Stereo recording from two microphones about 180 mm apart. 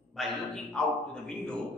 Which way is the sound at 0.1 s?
Centre (ahead or behind).